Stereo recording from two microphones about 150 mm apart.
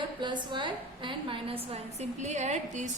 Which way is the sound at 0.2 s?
30° right (ahead or behind).